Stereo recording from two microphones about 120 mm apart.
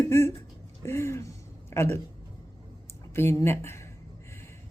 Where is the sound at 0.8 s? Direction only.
20° left (ahead or behind).